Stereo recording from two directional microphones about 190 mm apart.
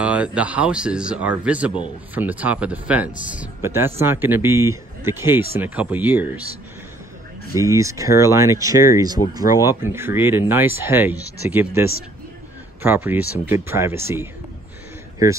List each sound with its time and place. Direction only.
0.0 s speech: 5° right (ahead or behind)
7.5 s speech: 15° right (ahead or behind)
12.8 s speech: 10° right (ahead or behind)